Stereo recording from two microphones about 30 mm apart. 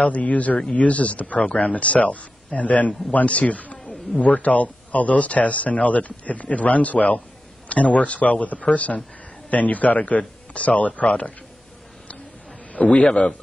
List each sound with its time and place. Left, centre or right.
0.0 s speech: left
12.7 s a man's voice: left